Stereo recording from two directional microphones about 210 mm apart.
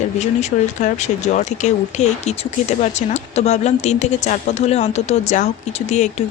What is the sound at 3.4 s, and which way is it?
Speech, 30° left (ahead or behind).